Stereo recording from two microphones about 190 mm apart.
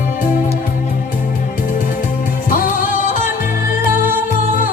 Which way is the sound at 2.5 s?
45° left (ahead or behind).